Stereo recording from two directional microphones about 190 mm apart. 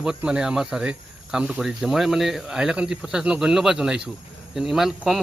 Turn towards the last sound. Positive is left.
turn(degrees=0)  # may be behind; listen again after turning